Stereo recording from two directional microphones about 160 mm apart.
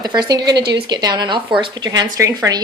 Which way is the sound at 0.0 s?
25° right (ahead or behind).